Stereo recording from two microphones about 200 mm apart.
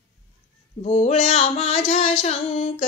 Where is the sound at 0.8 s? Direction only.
35° left (ahead or behind).